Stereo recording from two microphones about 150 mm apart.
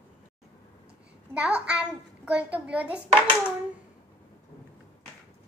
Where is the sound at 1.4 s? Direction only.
10° right (ahead or behind).